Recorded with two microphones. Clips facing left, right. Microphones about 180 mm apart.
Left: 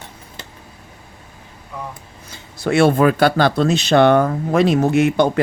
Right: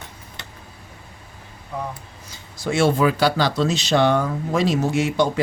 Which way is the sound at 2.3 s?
60° left (ahead or behind).